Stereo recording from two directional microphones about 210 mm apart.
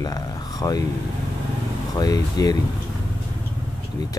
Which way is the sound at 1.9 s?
20° left (ahead or behind).